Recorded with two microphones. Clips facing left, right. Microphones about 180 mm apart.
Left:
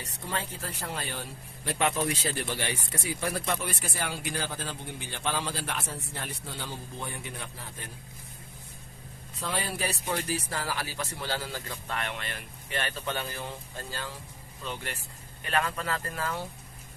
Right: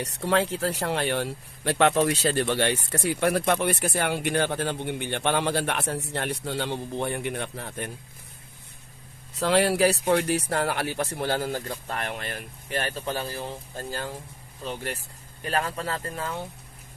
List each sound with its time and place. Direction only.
0.0 s speech: 75° right (ahead or behind)
9.4 s speech: 90° right; by 11.6 s 50° right (ahead or behind)
11.9 s speech: 40° right (ahead or behind)
13.9 s speech: 50° right (ahead or behind); by 16.5 s 20° right (ahead or behind)